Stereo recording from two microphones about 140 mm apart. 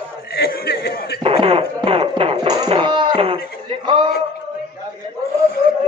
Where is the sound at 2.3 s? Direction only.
30° right (ahead or behind).